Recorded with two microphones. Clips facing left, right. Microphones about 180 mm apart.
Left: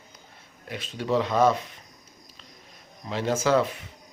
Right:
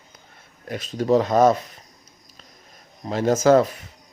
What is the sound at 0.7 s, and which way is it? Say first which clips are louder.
Speech: right 7 dB; 40° right (ahead or behind).